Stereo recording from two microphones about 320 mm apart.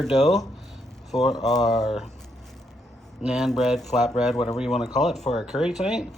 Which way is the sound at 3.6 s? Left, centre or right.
Centre.